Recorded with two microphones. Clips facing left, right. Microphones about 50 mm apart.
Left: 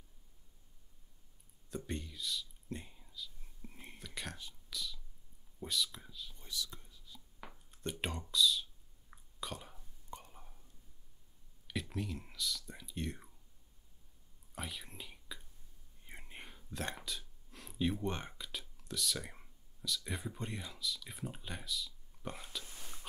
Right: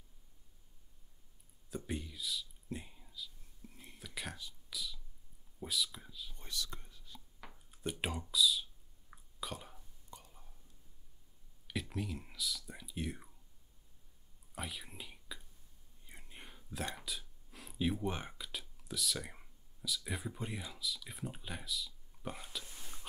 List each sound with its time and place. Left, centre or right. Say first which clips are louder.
1.7 s speech: right 1 dB; centre
3.6 s whispering: left 3 dB; left
4.0 s speech: right 1 dB; centre
4.6 s whispering: left 1 dB; centre
5.6 s speech: even; centre
6.4 s whispering: right 1 dB; right
7.4 s speech: right 1 dB; centre
9.1 s a sound: even; centre
10.1 s whispering: left 5 dB; left
11.6 s speech: even; centre
14.5 s whispering: right 1 dB; centre
16.1 s whispering: left 4 dB; left
16.3 s whispering: even; centre
16.9 s speech: even; centre